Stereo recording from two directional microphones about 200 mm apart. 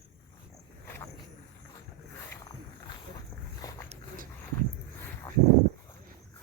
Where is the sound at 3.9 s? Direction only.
40° right (ahead or behind).